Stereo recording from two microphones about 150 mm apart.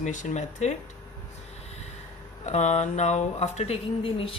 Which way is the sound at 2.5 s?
50° left (ahead or behind).